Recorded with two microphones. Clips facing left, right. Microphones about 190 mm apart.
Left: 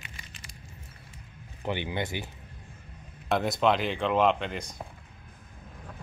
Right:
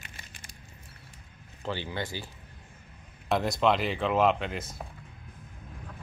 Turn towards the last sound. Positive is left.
turn(degrees=-5)  # may be behind; listen again after turning